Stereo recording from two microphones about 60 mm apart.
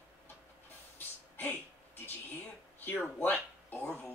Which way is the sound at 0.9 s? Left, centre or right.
Left.